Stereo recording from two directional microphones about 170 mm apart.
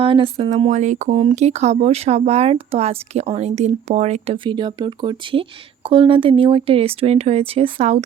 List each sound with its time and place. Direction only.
0.0 s speech: 30° right (ahead or behind)
4.4 s speech: 25° right (ahead or behind)